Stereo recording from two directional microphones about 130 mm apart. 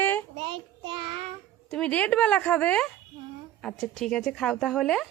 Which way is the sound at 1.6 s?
10° left (ahead or behind).